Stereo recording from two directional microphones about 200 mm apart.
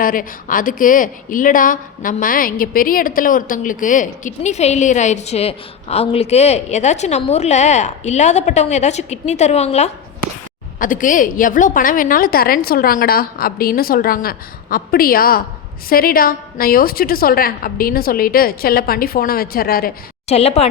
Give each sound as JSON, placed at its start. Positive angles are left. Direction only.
{"t": 0.0, "sound": "a woman's voice", "side_deg": 45}
{"t": 20.2, "sound": "a woman's voice", "side_deg": 30}